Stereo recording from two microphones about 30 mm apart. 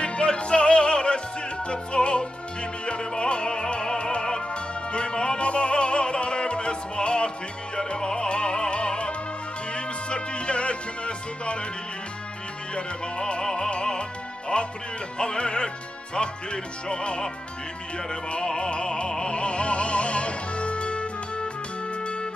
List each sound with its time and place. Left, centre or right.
0.0 s music: left
5.4 s opera: left
7.7 s music: left
12.7 s music: left
16.9 s music: left
18.3 s music: left